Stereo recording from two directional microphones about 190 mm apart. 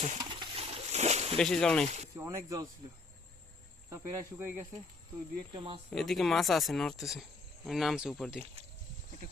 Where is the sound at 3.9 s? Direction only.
10° right (ahead or behind).